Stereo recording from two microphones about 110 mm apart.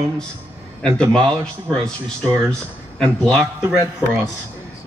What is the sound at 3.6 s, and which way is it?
Speech, 20° right (ahead or behind).